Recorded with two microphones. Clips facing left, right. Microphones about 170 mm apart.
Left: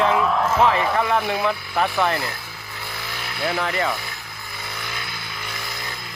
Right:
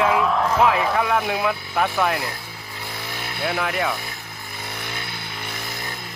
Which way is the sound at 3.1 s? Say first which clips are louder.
Right 1 dB; 25° right (ahead or behind).